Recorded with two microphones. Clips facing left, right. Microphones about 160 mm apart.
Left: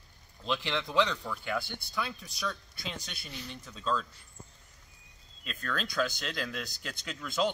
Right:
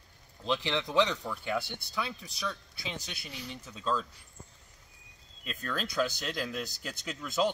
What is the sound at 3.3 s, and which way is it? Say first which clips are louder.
Speech: right 1 dB; 10° right (ahead or behind).